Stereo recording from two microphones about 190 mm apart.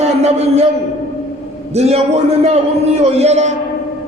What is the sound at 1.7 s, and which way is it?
A man's voice, 35° right (ahead or behind).